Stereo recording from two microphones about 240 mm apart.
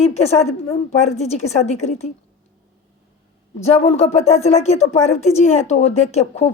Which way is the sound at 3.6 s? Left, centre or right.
Left.